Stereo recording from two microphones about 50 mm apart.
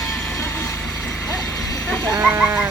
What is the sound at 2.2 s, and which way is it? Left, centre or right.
Chicken, right.